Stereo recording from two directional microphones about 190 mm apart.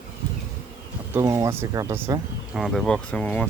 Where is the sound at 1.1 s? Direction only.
15° right (ahead or behind).